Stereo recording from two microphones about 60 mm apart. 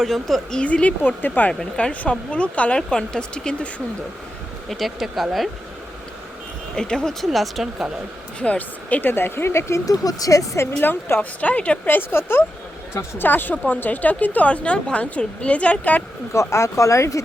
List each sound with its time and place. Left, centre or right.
0.0 s speech: centre
0.6 s a woman's voice: left
1.5 s a woman's voice: centre
4.7 s speech: centre
6.7 s speech: centre
8.4 s speech: left
9.8 s speech: left
10.8 s a woman's voice: left
11.9 s a woman's voice: left
16.3 s speech: left